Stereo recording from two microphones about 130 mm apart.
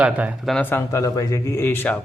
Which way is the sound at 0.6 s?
15° left (ahead or behind).